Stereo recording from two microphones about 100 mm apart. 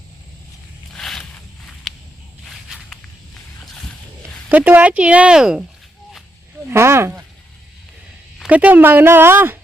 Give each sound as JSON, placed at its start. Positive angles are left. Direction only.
{"t": 0.9, "sound": "a sound", "side_deg": 5}
{"t": 2.4, "sound": "walk", "side_deg": 0}
{"t": 4.4, "sound": "speech", "side_deg": -15}
{"t": 6.7, "sound": "speech", "side_deg": -25}
{"t": 8.4, "sound": "speech", "side_deg": -15}